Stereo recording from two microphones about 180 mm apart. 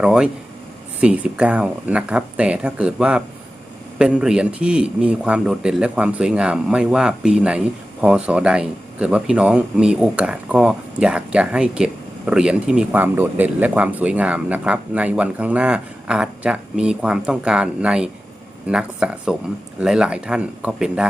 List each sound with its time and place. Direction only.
0.0 s a man's voice: 5° right (ahead or behind)